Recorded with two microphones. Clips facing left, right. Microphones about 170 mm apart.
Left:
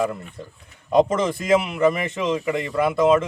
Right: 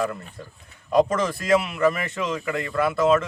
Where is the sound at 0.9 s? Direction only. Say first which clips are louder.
Left 2 dB; 20° left (ahead or behind).